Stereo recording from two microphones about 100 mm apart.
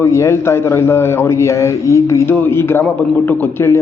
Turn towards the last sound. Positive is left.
turn(degrees=25)  # may be behind; listen again after turning